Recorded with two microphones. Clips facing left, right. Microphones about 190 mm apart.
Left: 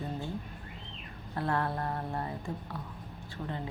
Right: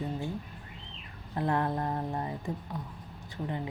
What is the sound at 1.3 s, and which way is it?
Speech, 20° right (ahead or behind).